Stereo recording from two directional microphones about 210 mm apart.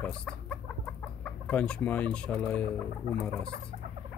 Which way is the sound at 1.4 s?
5° left (ahead or behind).